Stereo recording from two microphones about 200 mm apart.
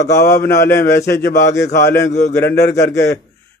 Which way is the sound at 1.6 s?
55° left (ahead or behind).